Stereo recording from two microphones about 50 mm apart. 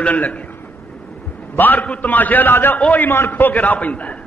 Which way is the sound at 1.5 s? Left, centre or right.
Left.